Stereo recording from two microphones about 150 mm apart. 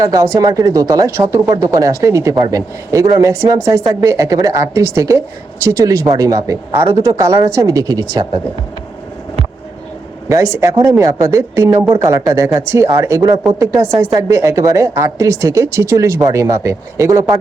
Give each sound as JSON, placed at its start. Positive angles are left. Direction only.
{"t": 0.0, "sound": "speech", "side_deg": -25}
{"t": 10.2, "sound": "speech", "side_deg": -20}